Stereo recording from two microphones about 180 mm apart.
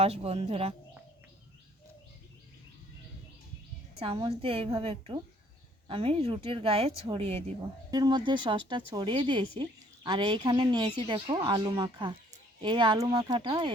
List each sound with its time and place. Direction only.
0.0 s speech: 35° right (ahead or behind)
4.0 s a woman's voice: 30° right (ahead or behind)
7.9 s a woman's voice: 25° right (ahead or behind)